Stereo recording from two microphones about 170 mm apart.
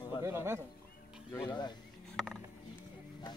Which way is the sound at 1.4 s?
25° left (ahead or behind).